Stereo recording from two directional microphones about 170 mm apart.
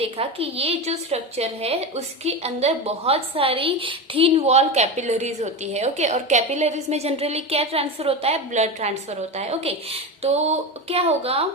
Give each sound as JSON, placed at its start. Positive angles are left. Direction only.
{"t": 0.0, "sound": "a woman's voice", "side_deg": -35}